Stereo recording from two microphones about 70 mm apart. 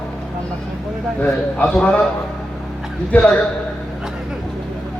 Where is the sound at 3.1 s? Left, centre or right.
Left.